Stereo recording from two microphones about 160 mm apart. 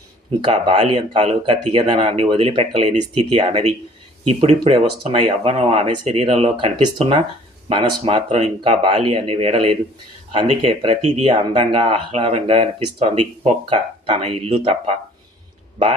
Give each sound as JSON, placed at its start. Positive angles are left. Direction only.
{"t": 0.3, "sound": "speech", "side_deg": -35}